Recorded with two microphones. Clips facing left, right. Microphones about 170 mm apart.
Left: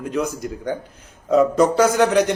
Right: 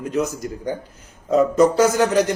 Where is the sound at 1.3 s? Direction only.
Centre (ahead or behind).